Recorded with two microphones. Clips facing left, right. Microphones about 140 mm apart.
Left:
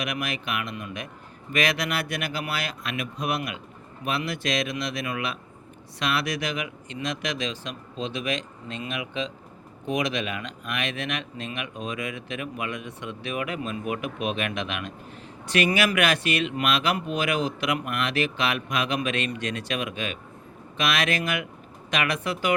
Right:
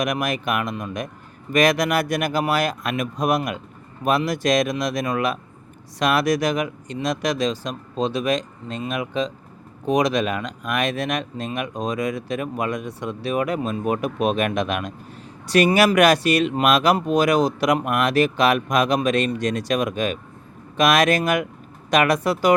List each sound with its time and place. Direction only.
0.0 s speech: 45° right (ahead or behind)